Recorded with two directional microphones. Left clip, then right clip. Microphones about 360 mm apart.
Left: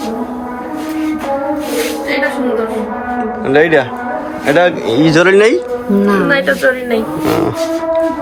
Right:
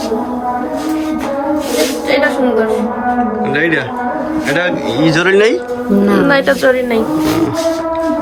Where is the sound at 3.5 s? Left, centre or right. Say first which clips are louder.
Left 9 dB; centre.